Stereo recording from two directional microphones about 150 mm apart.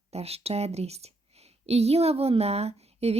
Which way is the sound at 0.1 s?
45° right (ahead or behind).